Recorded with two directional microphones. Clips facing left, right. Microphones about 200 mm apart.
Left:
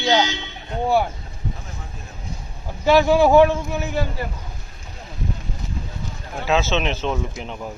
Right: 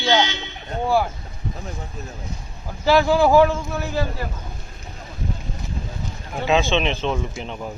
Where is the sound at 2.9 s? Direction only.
20° left (ahead or behind).